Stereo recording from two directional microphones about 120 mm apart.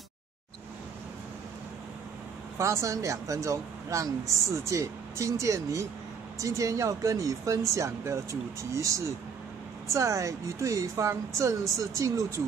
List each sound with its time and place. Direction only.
2.6 s speech: 25° right (ahead or behind)